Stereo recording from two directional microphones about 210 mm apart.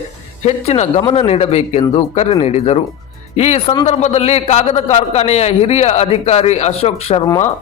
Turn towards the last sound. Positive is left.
turn(degrees=30)  # may be behind; listen again after turning